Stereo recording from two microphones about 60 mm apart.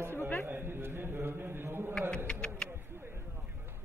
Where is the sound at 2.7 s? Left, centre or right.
Right.